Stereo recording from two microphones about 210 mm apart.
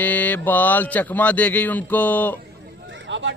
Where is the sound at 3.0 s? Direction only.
60° right (ahead or behind).